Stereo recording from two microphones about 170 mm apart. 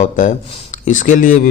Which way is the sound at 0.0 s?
45° left (ahead or behind).